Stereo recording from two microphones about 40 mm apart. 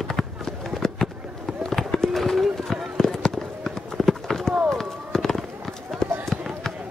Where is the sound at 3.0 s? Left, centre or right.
Centre.